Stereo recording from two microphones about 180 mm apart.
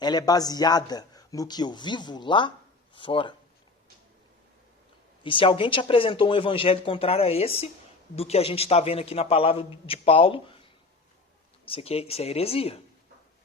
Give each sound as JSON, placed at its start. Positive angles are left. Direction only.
{"t": 0.0, "sound": "a man's voice", "side_deg": 20}
{"t": 5.2, "sound": "a man's voice", "side_deg": 30}